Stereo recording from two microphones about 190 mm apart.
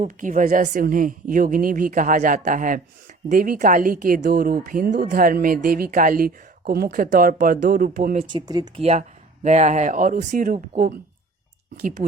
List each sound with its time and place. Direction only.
0.0 s speech: 45° right (ahead or behind)
8.2 s speech: 25° right (ahead or behind)
8.8 s speech: 35° right (ahead or behind)